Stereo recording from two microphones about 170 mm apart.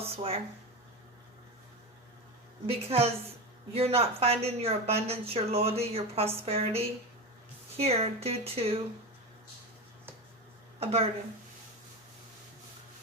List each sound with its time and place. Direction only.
0.2 s a woman's voice: 35° right (ahead or behind)
2.6 s a woman's voice: 35° right (ahead or behind)
10.8 s a woman's voice: 35° right (ahead or behind)